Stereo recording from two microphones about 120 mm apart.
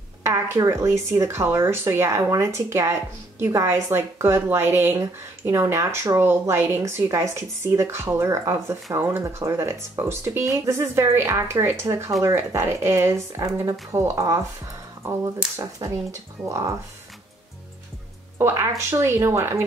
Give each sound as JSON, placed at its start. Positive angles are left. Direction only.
{"t": 0.2, "sound": "speech", "side_deg": -25}
{"t": 15.5, "sound": "speech", "side_deg": -30}
{"t": 18.4, "sound": "speech", "side_deg": -20}